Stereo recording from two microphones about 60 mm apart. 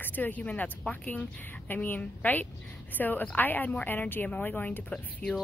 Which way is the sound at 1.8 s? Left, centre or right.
Left.